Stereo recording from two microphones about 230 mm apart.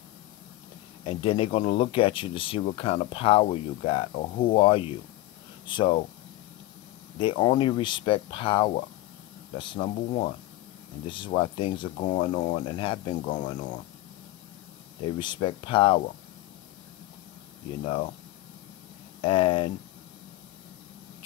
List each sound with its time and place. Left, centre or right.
1.0 s speech: left
7.2 s speech: left
15.0 s speech: centre
17.8 s speech: left
19.2 s speech: left